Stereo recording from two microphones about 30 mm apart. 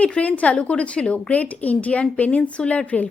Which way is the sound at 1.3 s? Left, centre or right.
Left.